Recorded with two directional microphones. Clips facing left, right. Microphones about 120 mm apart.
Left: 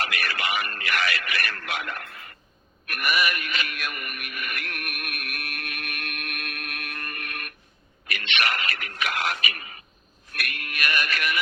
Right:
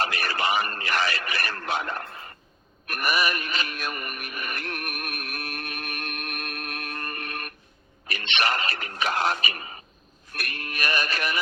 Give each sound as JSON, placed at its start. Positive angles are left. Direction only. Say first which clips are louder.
{"t": 0.0, "sound": "speech", "louder": "right 3 dB", "side_deg": -30}
{"t": 2.8, "sound": "music", "louder": "even", "side_deg": -35}
{"t": 8.0, "sound": "speech", "louder": "right 1 dB", "side_deg": -30}